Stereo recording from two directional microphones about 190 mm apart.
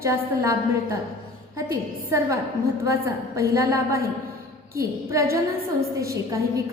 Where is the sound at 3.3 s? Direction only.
15° right (ahead or behind).